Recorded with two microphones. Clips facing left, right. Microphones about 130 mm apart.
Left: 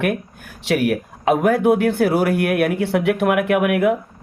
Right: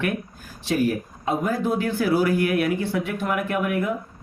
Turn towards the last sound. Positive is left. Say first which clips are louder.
# left 7 dB
turn(degrees=70)  # may be behind; listen again after turning